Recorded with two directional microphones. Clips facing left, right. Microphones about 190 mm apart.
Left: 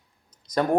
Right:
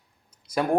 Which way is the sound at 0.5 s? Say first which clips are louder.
Left 1 dB; 10° right (ahead or behind).